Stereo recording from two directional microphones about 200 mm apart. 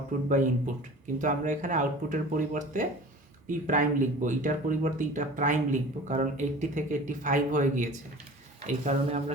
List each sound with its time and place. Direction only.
0.3 s speech: 40° right (ahead or behind)